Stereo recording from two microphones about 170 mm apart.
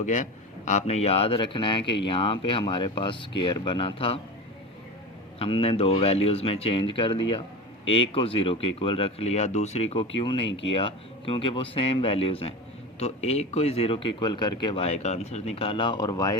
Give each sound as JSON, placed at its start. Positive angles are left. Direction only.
{"t": 0.0, "sound": "speech", "side_deg": 45}
{"t": 5.4, "sound": "speech", "side_deg": 35}